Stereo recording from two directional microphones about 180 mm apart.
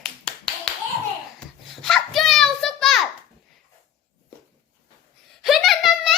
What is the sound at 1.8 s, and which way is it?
Children playing, centre (ahead or behind).